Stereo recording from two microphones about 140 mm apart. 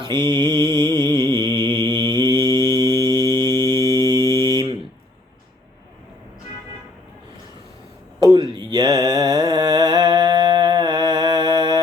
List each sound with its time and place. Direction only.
0.0 s mantra: 30° right (ahead or behind)
8.2 s mantra: 30° right (ahead or behind)